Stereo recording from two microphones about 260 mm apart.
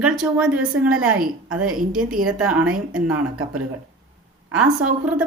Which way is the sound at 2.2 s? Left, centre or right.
Centre.